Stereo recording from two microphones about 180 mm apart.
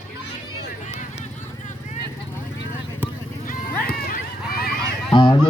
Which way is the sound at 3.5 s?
50° left (ahead or behind).